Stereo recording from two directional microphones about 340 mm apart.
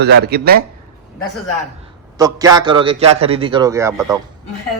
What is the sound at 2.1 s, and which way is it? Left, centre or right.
A man's voice, centre.